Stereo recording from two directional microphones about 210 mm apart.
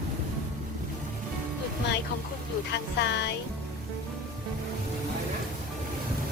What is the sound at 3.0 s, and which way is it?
Speech, 55° left (ahead or behind).